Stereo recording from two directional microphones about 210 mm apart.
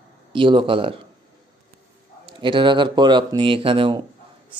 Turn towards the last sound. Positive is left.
turn(degrees=-25)  # may be behind; listen again after turning